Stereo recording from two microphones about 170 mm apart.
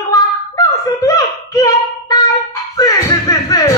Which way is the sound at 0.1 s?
20° left (ahead or behind).